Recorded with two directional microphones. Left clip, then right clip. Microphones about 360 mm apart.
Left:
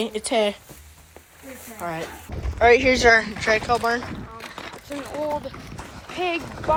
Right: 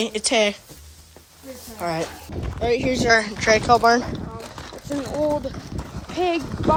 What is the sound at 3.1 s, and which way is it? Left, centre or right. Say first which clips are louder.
Speech: right 2 dB; centre.